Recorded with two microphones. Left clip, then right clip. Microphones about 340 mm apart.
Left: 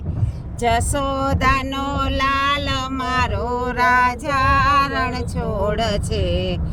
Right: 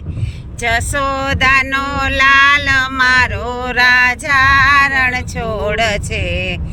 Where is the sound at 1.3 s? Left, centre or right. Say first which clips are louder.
Right 10 dB; centre.